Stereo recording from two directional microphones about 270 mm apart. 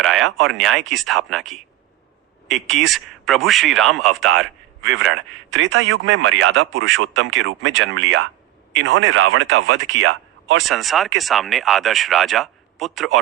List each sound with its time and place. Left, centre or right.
0.0 s speech: centre
2.5 s a man's voice: right
2.8 s speech: centre
4.3 s a man's voice: right
10.6 s speech: centre